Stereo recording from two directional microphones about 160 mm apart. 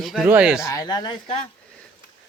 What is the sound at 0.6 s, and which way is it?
Speech, 20° left (ahead or behind).